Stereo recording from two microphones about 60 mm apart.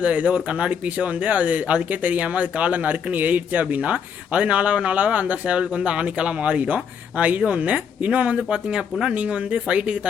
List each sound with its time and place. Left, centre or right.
0.0 s speech: right